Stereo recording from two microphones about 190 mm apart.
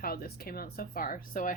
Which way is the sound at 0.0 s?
50° left (ahead or behind).